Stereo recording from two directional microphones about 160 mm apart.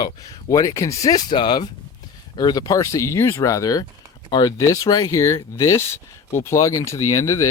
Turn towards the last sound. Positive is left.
turn(degrees=20)  # may be behind; listen again after turning